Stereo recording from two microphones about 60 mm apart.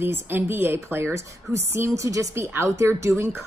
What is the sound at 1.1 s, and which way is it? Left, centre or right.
Speech, right.